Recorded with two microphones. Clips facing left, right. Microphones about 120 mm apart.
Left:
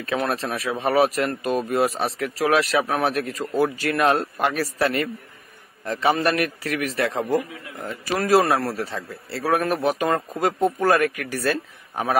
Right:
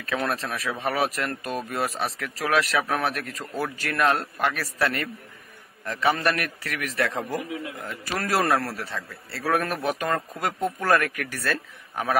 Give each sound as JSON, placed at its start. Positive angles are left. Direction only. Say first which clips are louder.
{"t": 0.0, "sound": "speech", "louder": "left 3 dB", "side_deg": 25}
{"t": 9.6, "sound": "a man's voice", "louder": "left 5 dB", "side_deg": 15}